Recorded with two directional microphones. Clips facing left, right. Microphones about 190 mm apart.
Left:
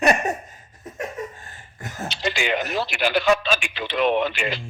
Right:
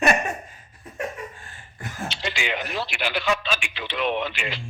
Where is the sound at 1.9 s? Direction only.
40° left (ahead or behind).